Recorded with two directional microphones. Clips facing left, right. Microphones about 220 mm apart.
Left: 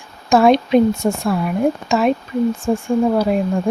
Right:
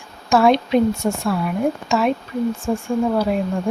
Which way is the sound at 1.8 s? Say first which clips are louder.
Left 3 dB; 20° left (ahead or behind).